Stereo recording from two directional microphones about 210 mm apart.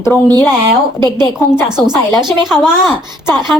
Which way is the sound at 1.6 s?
5° right (ahead or behind).